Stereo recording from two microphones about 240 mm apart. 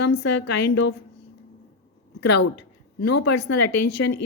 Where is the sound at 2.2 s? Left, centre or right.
Left.